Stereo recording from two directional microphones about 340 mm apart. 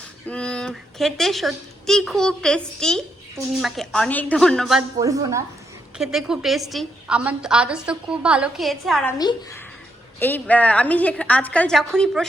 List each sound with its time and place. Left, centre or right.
0.3 s speech: centre